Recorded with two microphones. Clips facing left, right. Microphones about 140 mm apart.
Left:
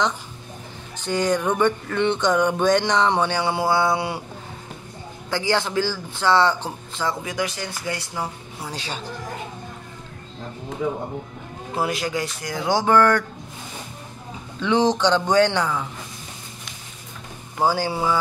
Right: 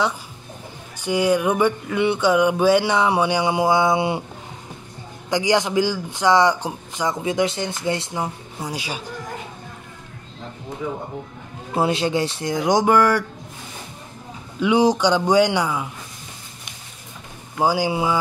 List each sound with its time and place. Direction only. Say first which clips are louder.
0.9 s speech: right 3 dB; 10° right (ahead or behind)
5.3 s speech: right 3 dB; 15° right (ahead or behind)
11.7 s speech: right 4 dB; 25° right (ahead or behind); by 13.2 s 10° right (ahead or behind)
14.6 s speech: right 2 dB; 10° right (ahead or behind)
17.6 s speech: right 2 dB; 15° right (ahead or behind)